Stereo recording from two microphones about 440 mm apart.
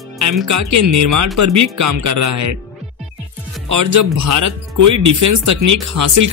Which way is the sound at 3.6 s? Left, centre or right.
Right.